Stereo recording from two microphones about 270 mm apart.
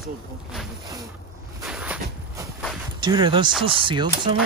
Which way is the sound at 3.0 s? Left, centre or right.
Centre.